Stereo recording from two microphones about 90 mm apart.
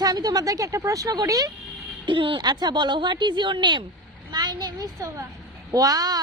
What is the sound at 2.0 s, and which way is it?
A woman's voice, 70° right (ahead or behind).